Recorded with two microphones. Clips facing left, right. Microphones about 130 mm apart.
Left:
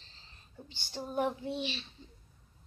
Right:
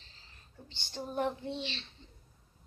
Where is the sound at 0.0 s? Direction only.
25° left (ahead or behind).